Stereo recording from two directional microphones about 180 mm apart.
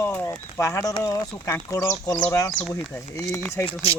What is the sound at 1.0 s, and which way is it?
Speech, 20° left (ahead or behind).